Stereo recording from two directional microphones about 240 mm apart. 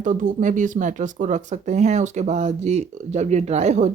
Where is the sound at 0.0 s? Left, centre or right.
Right.